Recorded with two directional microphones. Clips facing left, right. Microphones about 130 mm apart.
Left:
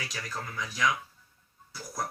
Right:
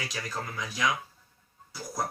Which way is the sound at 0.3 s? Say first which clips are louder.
Right 2 dB; 20° right (ahead or behind).